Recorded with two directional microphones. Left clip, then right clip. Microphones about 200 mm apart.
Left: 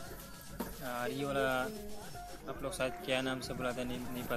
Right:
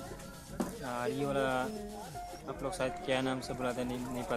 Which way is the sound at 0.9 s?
10° left (ahead or behind).